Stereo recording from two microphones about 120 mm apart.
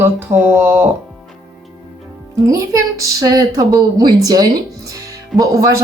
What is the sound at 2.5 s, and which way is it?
A woman's voice, 30° right (ahead or behind).